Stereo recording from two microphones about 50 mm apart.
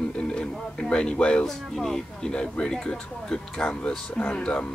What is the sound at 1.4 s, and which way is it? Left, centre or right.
Speech, centre.